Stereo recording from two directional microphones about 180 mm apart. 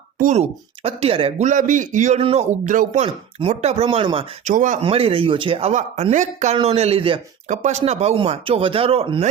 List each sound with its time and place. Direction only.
0.2 s speech: 40° right (ahead or behind)
3.3 s speech: 35° right (ahead or behind)
4.4 s speech: 45° right (ahead or behind)
4.8 s speech: 30° right (ahead or behind)